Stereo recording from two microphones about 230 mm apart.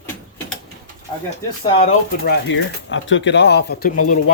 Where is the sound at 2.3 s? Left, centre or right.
Left.